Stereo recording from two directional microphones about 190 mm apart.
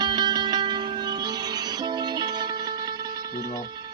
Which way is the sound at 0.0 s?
20° right (ahead or behind).